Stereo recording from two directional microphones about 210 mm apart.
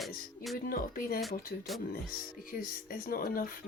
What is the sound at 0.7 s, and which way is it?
Speech, 45° left (ahead or behind).